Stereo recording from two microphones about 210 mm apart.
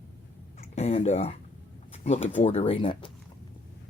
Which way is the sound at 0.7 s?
30° left (ahead or behind).